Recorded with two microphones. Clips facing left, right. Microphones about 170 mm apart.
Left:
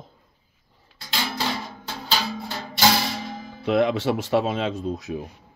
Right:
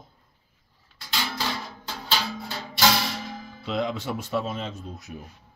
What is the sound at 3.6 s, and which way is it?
Speech, 65° left (ahead or behind).